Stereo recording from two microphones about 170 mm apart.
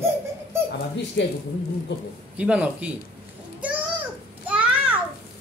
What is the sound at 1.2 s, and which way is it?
Speech, 90° left.